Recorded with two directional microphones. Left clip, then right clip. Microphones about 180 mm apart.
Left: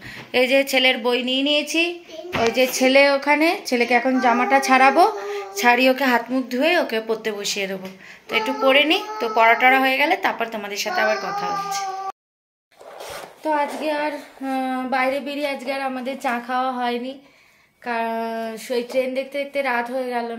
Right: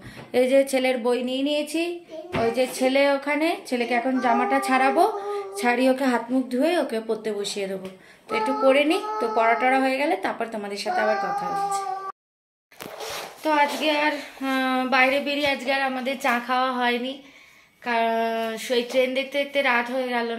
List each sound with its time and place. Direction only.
0.3 s speech: 20° right (ahead or behind)
1.0 s speech: 10° left (ahead or behind)
2.5 s a woman's voice: 35° left (ahead or behind)
5.3 s a sound: centre (ahead or behind)
13.4 s a sound: centre (ahead or behind)
17.8 s speech: 5° left (ahead or behind)